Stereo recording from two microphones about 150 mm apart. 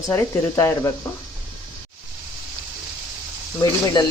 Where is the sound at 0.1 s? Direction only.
20° left (ahead or behind).